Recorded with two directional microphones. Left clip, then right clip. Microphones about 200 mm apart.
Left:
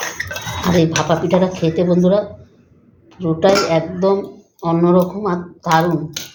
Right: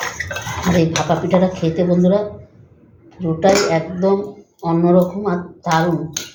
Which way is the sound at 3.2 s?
45° left (ahead or behind).